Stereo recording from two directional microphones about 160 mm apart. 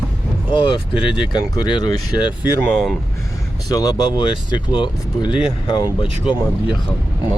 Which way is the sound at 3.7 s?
25° left (ahead or behind).